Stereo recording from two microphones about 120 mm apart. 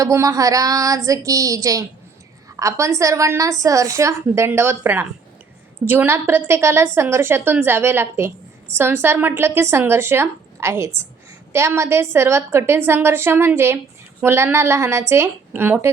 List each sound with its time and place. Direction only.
0.0 s a woman's voice: 25° right (ahead or behind)